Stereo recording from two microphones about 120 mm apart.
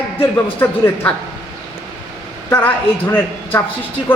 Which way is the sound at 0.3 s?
15° left (ahead or behind).